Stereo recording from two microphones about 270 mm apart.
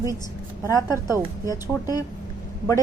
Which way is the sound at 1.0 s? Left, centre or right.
Centre.